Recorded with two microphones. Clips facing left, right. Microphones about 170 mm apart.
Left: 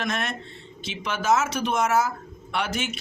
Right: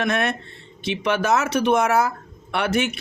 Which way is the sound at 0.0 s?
60° right (ahead or behind).